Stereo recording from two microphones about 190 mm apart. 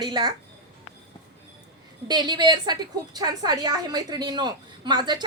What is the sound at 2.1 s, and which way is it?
A woman's voice, 20° right (ahead or behind).